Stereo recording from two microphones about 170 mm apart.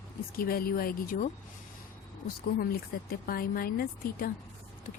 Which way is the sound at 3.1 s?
60° left (ahead or behind).